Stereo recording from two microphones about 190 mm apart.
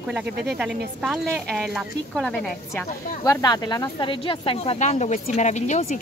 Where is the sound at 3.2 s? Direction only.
20° left (ahead or behind); by 6.0 s 40° left (ahead or behind).